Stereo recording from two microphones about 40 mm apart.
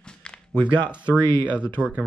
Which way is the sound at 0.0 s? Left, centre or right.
Left.